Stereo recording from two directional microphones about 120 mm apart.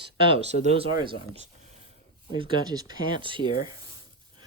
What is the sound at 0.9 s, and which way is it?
Speech, 40° right (ahead or behind).